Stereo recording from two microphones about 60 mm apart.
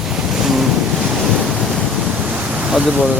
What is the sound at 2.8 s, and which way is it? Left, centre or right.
Speech, centre.